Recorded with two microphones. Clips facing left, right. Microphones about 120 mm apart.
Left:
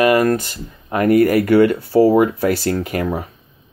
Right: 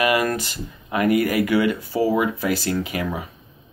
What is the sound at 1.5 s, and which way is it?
Speech, 50° left (ahead or behind).